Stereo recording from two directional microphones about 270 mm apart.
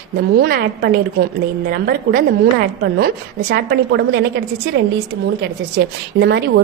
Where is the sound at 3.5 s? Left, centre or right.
Right.